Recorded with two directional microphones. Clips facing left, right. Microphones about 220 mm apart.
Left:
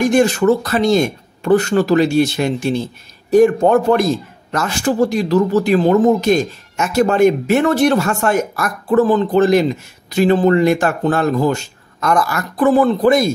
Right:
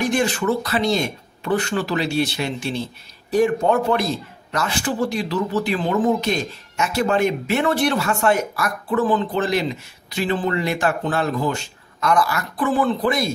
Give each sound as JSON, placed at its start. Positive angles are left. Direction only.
{"t": 0.0, "sound": "speech", "side_deg": 45}